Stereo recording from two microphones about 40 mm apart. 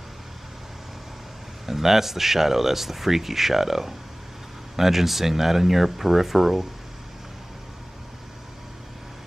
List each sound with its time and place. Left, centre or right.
1.7 s speech: centre